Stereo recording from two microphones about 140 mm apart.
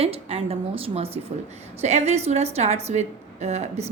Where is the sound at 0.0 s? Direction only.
45° right (ahead or behind).